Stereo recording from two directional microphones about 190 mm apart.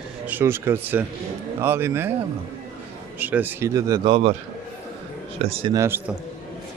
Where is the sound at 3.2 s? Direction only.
10° right (ahead or behind); by 4.3 s 25° right (ahead or behind).